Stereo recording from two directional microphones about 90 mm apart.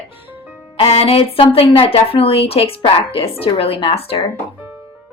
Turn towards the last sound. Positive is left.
turn(degrees=90)